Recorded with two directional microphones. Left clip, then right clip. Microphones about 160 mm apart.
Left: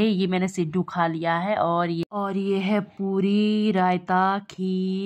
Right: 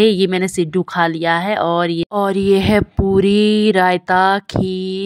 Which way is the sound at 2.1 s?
40° right (ahead or behind).